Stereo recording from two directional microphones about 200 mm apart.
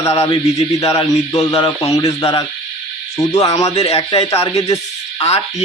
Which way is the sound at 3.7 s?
30° left (ahead or behind).